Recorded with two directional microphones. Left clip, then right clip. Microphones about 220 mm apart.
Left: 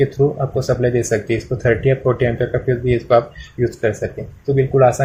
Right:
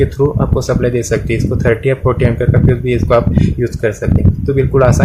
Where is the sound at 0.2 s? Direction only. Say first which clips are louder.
Right 3 dB; 15° right (ahead or behind).